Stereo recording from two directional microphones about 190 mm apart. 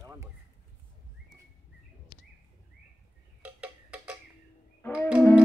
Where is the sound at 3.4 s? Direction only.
5° right (ahead or behind).